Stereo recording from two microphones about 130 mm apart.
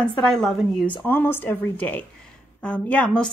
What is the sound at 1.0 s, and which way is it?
A woman's voice, 15° left (ahead or behind).